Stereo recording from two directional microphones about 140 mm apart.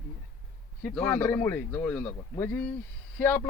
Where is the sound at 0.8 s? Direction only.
10° left (ahead or behind).